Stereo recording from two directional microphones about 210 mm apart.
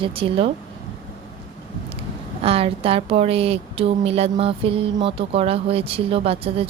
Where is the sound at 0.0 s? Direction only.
25° right (ahead or behind).